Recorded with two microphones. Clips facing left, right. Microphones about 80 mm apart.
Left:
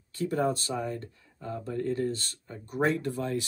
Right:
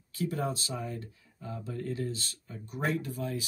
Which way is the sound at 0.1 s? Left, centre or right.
Left.